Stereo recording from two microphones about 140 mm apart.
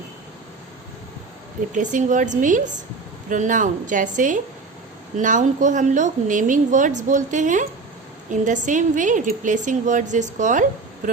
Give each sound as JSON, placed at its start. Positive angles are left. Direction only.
{"t": 1.7, "sound": "a woman's voice", "side_deg": -65}